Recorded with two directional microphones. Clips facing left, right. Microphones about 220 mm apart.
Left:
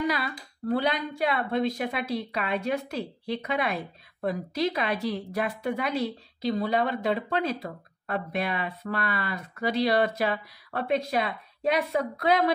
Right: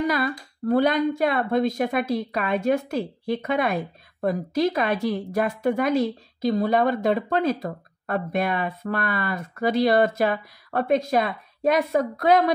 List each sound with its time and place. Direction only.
0.0 s speech: 45° right (ahead or behind)